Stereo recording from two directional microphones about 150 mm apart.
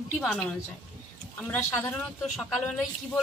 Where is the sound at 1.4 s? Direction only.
10° left (ahead or behind).